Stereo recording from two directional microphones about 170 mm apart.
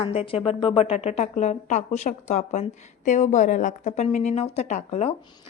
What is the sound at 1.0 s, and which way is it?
A woman's voice, 45° left (ahead or behind).